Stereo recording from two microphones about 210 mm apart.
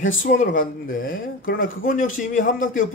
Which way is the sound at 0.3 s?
40° left (ahead or behind).